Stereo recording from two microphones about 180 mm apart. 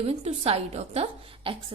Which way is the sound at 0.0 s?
35° right (ahead or behind).